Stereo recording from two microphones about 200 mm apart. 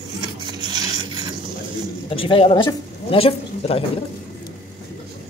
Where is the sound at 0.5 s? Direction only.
20° right (ahead or behind).